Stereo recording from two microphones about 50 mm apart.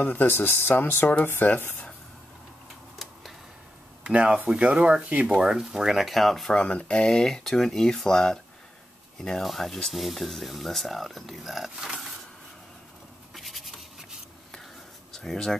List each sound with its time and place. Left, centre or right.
0.0 s speech: left
4.0 s speech: right; by 6.5 s centre
6.5 s speech: centre
9.4 s speech: centre
13.3 s insect: centre
15.1 s speech: centre